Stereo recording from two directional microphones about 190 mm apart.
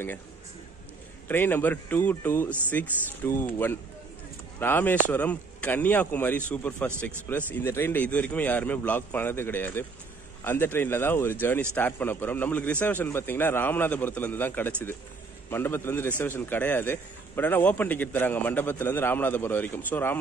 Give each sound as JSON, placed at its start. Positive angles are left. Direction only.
{"t": 1.3, "sound": "speech", "side_deg": 10}